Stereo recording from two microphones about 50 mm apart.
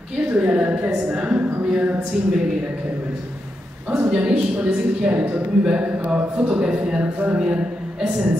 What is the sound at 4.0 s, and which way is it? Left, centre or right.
A woman's voice, centre.